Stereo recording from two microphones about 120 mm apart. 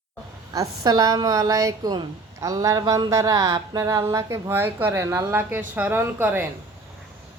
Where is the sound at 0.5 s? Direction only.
30° right (ahead or behind).